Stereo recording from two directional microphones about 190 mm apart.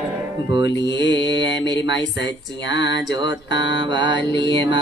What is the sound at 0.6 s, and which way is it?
Mantra, 70° left (ahead or behind).